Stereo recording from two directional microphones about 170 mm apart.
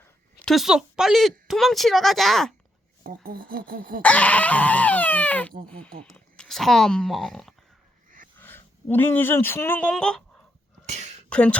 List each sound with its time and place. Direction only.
0.3 s speech: centre (ahead or behind)
3.0 s speech: 60° right (ahead or behind)
4.0 s speech: 10° left (ahead or behind)
8.4 s speech: 10° left (ahead or behind)
10.8 s a sound: 40° right (ahead or behind)
11.3 s speech: 5° left (ahead or behind)